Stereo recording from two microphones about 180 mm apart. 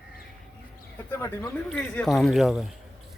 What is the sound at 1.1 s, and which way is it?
Speech, 15° left (ahead or behind).